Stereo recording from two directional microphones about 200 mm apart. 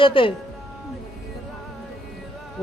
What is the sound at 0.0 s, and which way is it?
Speech, 25° left (ahead or behind).